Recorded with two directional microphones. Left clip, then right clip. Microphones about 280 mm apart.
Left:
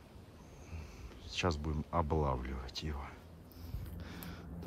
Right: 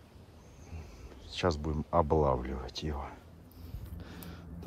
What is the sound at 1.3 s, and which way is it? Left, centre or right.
Speech, centre.